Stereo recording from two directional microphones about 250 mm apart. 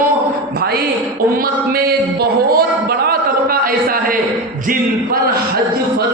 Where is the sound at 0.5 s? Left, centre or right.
Right.